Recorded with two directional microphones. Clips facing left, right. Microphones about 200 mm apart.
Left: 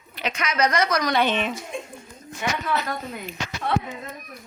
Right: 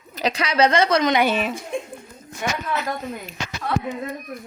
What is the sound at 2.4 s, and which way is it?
Speech, 45° right (ahead or behind).